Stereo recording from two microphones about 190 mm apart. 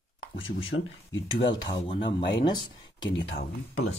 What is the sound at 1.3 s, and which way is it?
Speech, 25° left (ahead or behind).